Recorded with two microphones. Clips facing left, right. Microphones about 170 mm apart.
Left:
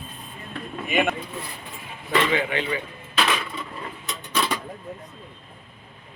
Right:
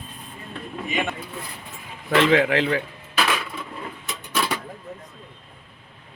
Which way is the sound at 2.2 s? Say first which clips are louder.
Right 6 dB; 90° right.